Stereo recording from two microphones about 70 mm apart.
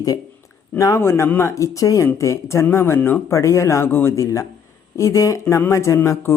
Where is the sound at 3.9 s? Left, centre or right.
Left.